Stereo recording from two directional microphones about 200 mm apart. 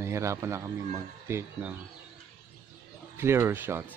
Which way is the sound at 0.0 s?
15° right (ahead or behind).